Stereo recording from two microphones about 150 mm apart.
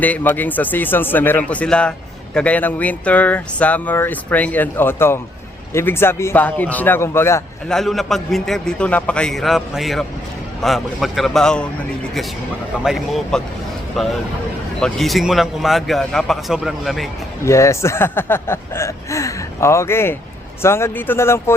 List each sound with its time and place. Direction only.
0.0 s speech: 10° left (ahead or behind)
7.7 s a man's voice: centre (ahead or behind)
12.8 s a man's voice: centre (ahead or behind)
14.8 s a man's voice: 5° left (ahead or behind)
17.4 s speech: 20° left (ahead or behind)